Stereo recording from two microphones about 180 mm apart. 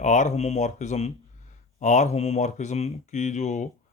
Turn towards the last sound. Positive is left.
turn(degrees=40)  # may be behind; listen again after turning